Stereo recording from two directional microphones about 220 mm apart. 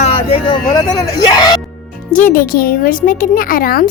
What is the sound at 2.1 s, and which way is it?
Speech, 40° left (ahead or behind).